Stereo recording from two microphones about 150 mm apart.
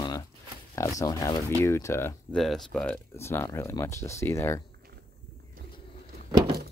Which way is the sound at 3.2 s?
15° left (ahead or behind).